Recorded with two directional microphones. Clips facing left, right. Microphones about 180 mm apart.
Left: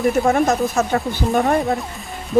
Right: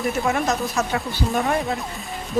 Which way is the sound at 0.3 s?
50° left (ahead or behind).